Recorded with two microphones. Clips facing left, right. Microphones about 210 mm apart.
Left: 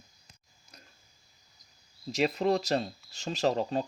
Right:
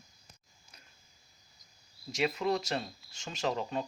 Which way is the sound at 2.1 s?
35° left (ahead or behind).